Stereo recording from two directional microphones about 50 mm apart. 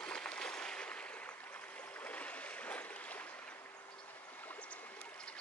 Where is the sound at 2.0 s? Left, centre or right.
Left.